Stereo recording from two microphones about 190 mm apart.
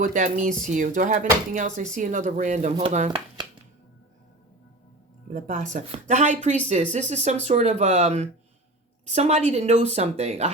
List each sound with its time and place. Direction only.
0.0 s speech: 40° right (ahead or behind)
5.3 s speech: 45° right (ahead or behind)